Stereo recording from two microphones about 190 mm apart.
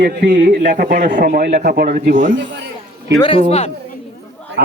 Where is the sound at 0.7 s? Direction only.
45° right (ahead or behind).